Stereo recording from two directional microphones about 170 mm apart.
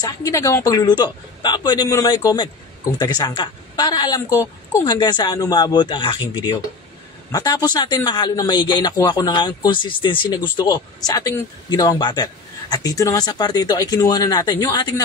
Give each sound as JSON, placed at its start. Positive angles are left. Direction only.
{"t": 0.0, "sound": "a man's voice", "side_deg": 20}